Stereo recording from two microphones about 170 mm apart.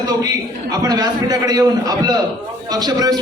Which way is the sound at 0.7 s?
20° right (ahead or behind).